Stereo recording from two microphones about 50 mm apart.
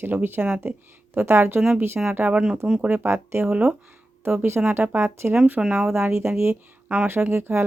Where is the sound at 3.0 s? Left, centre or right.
Right.